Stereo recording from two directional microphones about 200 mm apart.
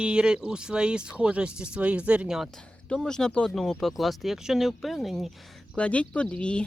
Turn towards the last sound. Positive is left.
turn(degrees=5)  # may be behind; listen again after turning